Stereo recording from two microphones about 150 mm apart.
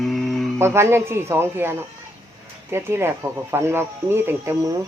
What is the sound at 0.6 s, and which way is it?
Speech, 15° right (ahead or behind).